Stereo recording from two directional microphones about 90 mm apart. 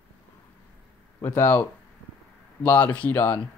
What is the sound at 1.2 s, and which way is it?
Speech, 25° left (ahead or behind).